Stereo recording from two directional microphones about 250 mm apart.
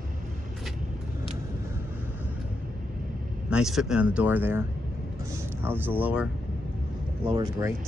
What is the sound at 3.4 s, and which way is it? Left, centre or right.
Speech, centre.